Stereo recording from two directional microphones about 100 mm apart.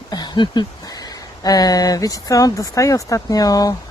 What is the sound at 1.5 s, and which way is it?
Speech, 40° left (ahead or behind).